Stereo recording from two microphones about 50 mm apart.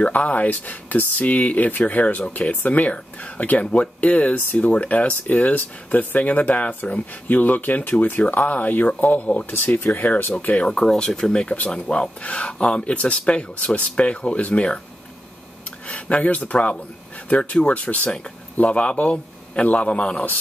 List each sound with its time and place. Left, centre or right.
0.0 s speech: left
10.8 s speech: centre
11.5 s speech: left
15.9 s speech: left